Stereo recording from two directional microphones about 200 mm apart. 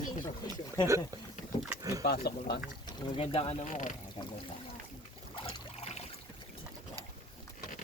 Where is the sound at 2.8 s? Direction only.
25° left (ahead or behind); by 3.9 s 40° left (ahead or behind).